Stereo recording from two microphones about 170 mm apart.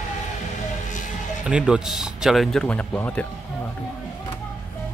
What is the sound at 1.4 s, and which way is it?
Speech, 5° right (ahead or behind).